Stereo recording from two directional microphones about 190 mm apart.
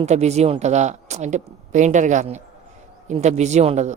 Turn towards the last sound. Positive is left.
turn(degrees=-35)  # may be behind; listen again after turning